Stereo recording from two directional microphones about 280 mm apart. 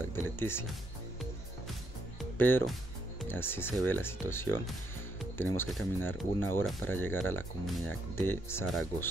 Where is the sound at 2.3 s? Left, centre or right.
Centre.